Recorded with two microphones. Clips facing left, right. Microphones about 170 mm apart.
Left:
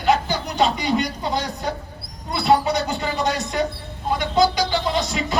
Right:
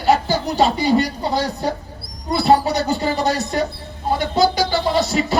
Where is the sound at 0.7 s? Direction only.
35° right (ahead or behind).